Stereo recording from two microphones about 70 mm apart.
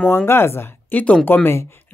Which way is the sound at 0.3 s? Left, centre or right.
Left.